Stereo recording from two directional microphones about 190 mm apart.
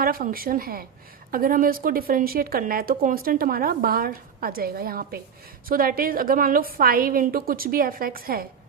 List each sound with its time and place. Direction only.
0.0 s speech: 50° right (ahead or behind)